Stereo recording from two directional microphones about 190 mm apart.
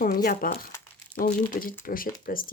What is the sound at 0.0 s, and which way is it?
Speech, 50° left (ahead or behind).